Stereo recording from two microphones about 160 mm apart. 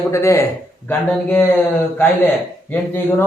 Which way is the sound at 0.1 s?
15° left (ahead or behind).